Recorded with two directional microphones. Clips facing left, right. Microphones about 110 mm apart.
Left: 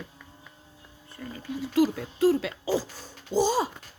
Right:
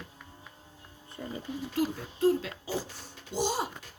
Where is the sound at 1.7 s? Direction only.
90° left.